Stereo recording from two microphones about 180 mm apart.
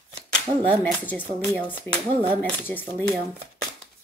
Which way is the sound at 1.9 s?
15° left (ahead or behind).